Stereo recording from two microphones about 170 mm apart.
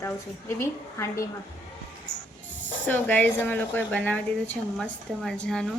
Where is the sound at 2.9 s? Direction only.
10° left (ahead or behind).